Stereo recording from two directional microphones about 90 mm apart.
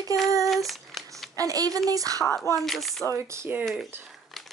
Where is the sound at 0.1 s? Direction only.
40° right (ahead or behind).